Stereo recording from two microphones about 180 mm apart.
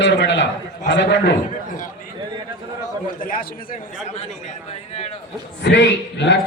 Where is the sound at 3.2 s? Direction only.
50° left (ahead or behind).